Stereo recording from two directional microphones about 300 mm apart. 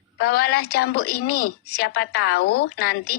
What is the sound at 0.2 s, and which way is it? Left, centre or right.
A woman's voice, left.